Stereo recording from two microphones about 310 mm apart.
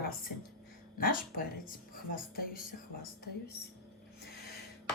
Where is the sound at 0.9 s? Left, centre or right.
Left.